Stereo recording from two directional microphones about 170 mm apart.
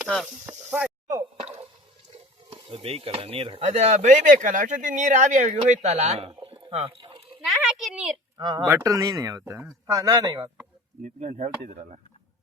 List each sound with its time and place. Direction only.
0.0 s speech: centre (ahead or behind)
1.4 s drip: 40° right (ahead or behind)
2.1 s stir: 30° right (ahead or behind)
7.4 s a sound: 5° right (ahead or behind)
8.4 s speech: 25° right (ahead or behind)
8.6 s speech: 15° right (ahead or behind)
11.0 s speech: 45° right (ahead or behind)